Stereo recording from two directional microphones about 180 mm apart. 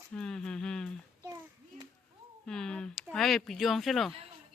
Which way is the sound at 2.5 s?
5° left (ahead or behind).